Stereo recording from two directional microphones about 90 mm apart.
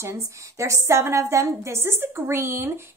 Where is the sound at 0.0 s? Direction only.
30° right (ahead or behind).